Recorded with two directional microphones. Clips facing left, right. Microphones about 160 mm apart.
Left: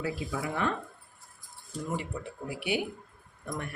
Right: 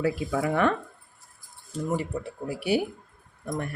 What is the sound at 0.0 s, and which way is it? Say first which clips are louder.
Speech: right 7 dB; 55° right (ahead or behind).